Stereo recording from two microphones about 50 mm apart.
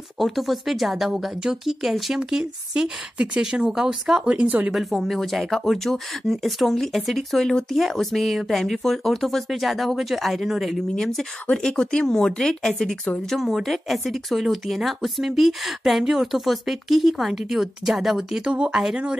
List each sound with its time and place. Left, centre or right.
0.2 s speech: centre; by 4.7 s right
5.0 s speech: centre
11.0 s speech: centre